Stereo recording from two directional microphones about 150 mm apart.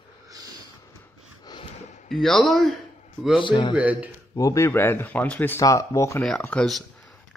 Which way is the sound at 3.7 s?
10° right (ahead or behind).